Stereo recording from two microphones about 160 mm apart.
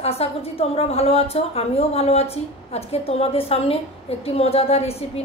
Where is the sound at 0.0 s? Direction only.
40° left (ahead or behind).